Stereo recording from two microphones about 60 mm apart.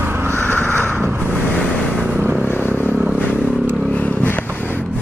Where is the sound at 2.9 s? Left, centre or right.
Right.